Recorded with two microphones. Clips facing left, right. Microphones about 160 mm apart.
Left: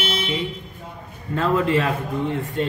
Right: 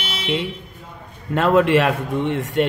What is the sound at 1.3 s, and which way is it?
A man's voice, 75° right (ahead or behind).